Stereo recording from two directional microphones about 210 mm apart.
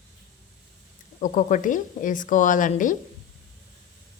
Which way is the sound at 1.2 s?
40° left (ahead or behind).